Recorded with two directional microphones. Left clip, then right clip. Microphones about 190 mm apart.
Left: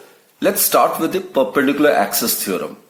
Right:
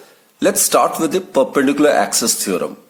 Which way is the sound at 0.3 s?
40° right (ahead or behind).